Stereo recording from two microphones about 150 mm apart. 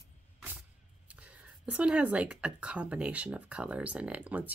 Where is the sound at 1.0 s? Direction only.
10° right (ahead or behind).